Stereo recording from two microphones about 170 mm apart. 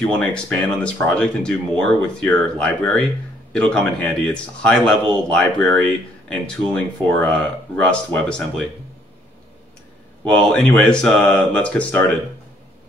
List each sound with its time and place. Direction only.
0.0 s a man's voice: 5° left (ahead or behind)
10.2 s speech: 5° left (ahead or behind)